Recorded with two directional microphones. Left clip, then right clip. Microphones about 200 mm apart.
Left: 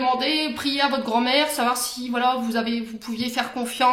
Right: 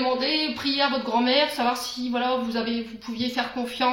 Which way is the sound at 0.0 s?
50° left (ahead or behind).